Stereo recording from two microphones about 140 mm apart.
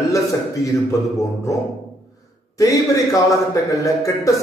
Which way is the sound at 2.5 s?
25° left (ahead or behind).